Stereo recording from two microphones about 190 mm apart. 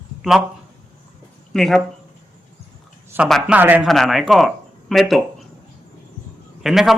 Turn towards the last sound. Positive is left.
turn(degrees=0)  # may be behind; listen again after turning